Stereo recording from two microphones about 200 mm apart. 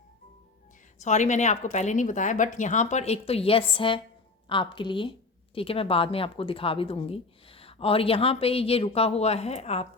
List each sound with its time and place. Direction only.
1.0 s a woman's voice: 35° left (ahead or behind)